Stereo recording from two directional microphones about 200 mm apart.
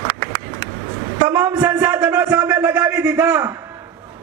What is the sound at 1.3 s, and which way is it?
A man's voice, 10° right (ahead or behind).